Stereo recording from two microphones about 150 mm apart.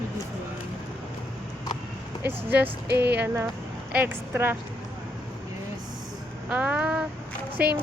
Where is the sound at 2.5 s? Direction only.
90° right.